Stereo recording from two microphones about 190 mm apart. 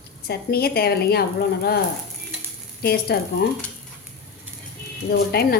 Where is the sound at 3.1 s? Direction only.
55° left (ahead or behind).